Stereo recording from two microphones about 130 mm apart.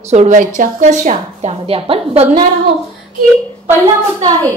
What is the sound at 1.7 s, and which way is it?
Speech, 50° right (ahead or behind).